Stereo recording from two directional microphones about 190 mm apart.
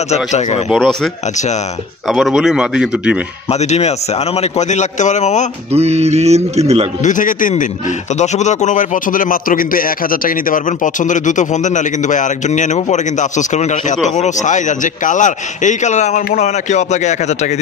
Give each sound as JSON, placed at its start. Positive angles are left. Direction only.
{"t": 0.1, "sound": "a man's voice", "side_deg": 35}
{"t": 0.7, "sound": "a man's voice", "side_deg": 0}
{"t": 2.0, "sound": "a man's voice", "side_deg": 0}
{"t": 3.5, "sound": "a man's voice", "side_deg": 35}
{"t": 5.7, "sound": "speech", "side_deg": -35}
{"t": 7.0, "sound": "a man's voice", "side_deg": 40}